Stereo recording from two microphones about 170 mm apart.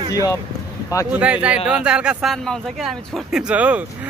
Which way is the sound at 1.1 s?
5° right (ahead or behind).